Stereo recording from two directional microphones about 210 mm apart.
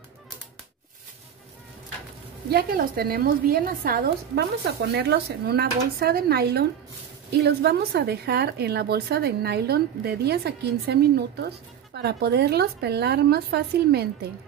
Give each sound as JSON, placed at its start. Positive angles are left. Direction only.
{"t": 2.5, "sound": "a woman's voice", "side_deg": -45}